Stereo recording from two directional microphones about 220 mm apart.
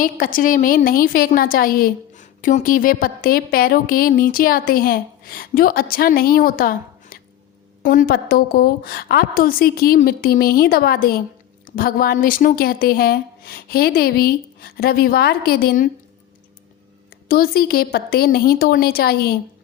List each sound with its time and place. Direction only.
0.0 s a woman's voice: 40° left (ahead or behind)
17.2 s speech: 45° left (ahead or behind)